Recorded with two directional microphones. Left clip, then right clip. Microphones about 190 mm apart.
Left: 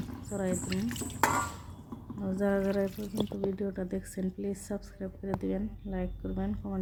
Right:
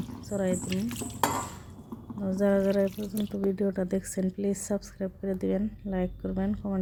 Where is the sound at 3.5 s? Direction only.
25° right (ahead or behind).